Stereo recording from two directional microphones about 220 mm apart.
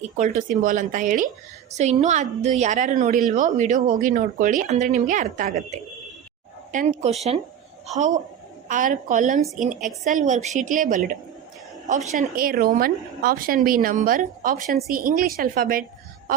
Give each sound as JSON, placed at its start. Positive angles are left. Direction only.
{"t": 0.2, "sound": "a woman's voice", "side_deg": -35}